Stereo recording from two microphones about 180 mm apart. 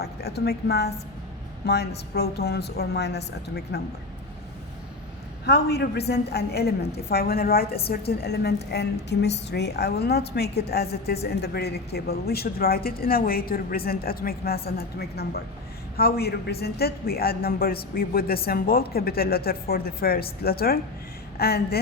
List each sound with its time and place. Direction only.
0.0 s a woman's voice: 65° left (ahead or behind)
5.5 s a woman's voice: 65° left (ahead or behind)